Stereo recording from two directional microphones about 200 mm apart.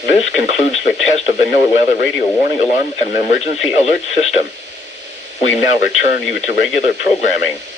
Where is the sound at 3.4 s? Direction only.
35° left (ahead or behind).